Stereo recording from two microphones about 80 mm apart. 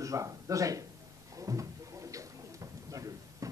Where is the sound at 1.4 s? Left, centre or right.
Right.